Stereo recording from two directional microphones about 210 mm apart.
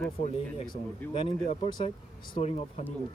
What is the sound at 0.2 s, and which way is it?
Speech, 40° left (ahead or behind).